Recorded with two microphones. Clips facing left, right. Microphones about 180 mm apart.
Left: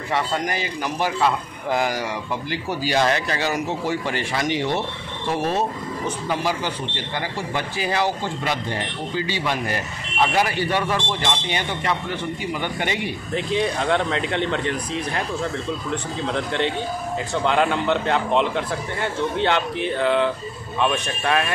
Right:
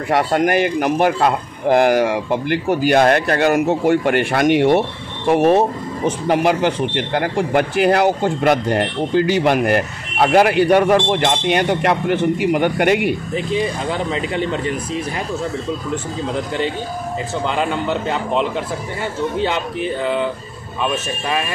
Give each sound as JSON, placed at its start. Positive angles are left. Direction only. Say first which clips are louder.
{"t": 0.1, "sound": "speech", "louder": "right 8 dB", "side_deg": -60}
{"t": 13.3, "sound": "speech", "louder": "right 2 dB", "side_deg": 0}
{"t": 17.5, "sound": "speech", "louder": "left 1 dB", "side_deg": 0}